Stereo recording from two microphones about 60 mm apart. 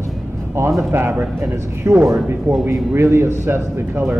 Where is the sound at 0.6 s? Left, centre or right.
Right.